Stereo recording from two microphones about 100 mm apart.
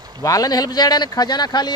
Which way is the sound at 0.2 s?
35° left (ahead or behind).